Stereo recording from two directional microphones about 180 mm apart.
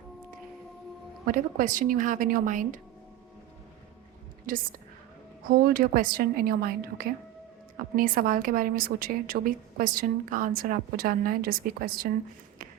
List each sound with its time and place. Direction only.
1.2 s a woman's voice: 50° right (ahead or behind)
4.4 s a woman's voice: 50° right (ahead or behind)